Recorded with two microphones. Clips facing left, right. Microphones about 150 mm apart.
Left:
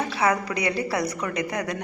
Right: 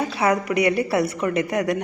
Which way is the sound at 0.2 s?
20° right (ahead or behind).